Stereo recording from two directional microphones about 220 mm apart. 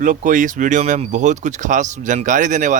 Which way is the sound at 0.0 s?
35° right (ahead or behind).